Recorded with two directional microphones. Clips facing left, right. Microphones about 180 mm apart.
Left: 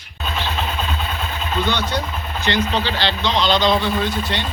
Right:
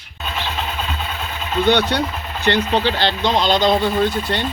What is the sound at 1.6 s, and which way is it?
Speech, 65° right (ahead or behind).